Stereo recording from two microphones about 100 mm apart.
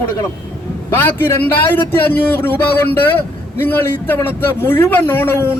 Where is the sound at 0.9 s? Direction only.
20° left (ahead or behind).